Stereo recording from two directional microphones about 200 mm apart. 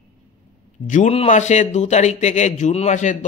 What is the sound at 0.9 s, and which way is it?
A man's voice, 35° left (ahead or behind).